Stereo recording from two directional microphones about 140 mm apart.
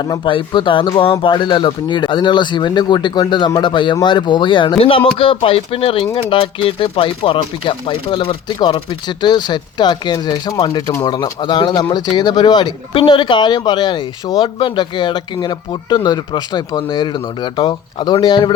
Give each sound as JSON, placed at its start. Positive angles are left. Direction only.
{"t": 0.0, "sound": "speech", "side_deg": 35}